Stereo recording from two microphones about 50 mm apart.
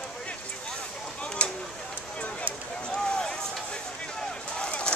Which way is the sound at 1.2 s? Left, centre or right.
Left.